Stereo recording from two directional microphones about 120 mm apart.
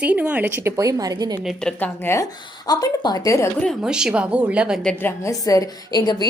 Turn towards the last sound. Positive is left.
turn(degrees=35)  # may be behind; listen again after turning